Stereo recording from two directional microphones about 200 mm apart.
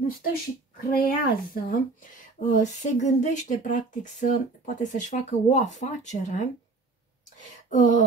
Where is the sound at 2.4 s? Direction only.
35° left (ahead or behind).